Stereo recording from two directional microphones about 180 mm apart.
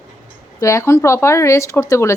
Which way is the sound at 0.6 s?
15° left (ahead or behind).